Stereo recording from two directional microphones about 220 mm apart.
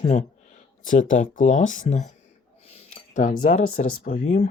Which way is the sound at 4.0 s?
35° left (ahead or behind).